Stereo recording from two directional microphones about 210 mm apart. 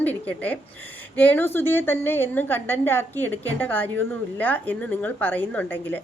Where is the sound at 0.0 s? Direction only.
10° left (ahead or behind).